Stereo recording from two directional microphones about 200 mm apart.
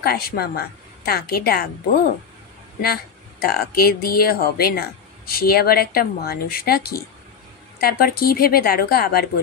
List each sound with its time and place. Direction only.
0.0 s speech: 50° left (ahead or behind)
2.8 s speech: 50° left (ahead or behind)